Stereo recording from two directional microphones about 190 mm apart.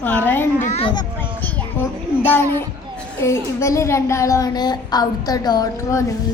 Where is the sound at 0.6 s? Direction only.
35° left (ahead or behind).